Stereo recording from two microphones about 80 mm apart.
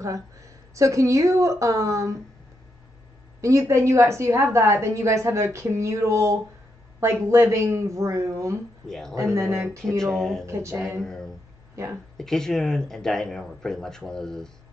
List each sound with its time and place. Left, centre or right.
0.0 s a woman's voice: right
3.3 s a woman's voice: right
8.8 s speech: centre
9.1 s a woman's voice: right
9.9 s speech: centre
10.4 s a woman's voice: right
11.0 s speech: centre